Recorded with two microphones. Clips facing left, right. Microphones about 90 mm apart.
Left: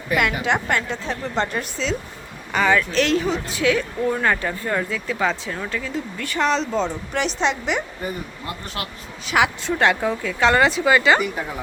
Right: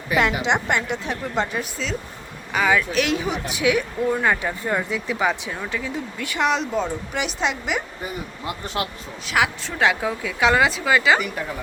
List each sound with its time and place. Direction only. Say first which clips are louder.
0.2 s a woman's voice: right 2 dB; 20° right (ahead or behind)
1.4 s speech: left 1 dB; 5° right (ahead or behind)
9.2 s speech: left 2 dB; centre (ahead or behind)